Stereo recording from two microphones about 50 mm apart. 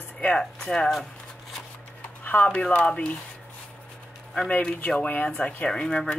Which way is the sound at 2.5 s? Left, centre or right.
Left.